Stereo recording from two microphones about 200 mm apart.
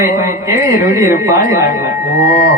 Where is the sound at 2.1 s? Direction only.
40° left (ahead or behind).